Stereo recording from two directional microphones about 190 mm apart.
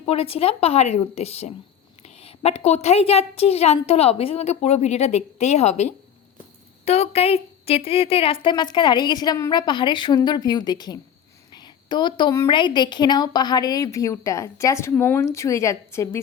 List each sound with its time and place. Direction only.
0.0 s a woman's voice: 30° left (ahead or behind); by 16.2 s 15° left (ahead or behind)